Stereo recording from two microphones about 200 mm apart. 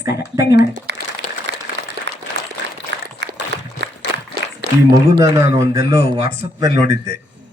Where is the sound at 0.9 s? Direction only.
60° right (ahead or behind).